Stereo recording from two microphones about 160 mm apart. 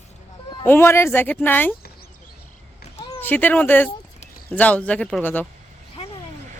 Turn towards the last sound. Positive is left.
turn(degrees=10)  # may be behind; listen again after turning